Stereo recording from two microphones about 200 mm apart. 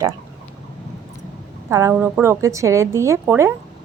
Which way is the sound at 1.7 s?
15° right (ahead or behind).